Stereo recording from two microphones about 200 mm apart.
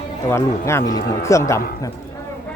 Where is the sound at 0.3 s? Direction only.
15° left (ahead or behind).